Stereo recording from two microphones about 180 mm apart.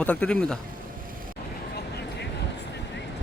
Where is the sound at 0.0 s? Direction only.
10° left (ahead or behind).